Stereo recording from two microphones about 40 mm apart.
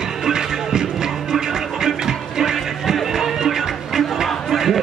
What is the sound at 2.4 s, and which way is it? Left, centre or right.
Music, centre.